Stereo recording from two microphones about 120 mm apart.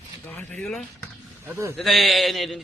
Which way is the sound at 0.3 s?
5° left (ahead or behind).